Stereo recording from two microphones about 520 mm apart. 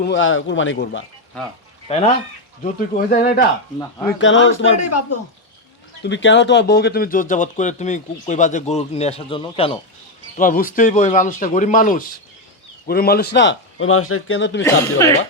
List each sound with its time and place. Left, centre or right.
0.0 s speech: left
3.8 s speech: centre
4.2 s speech: left
14.6 s speech: centre